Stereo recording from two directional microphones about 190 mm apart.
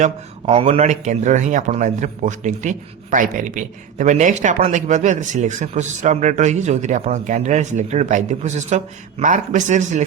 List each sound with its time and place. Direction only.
0.4 s a man's voice: 35° right (ahead or behind)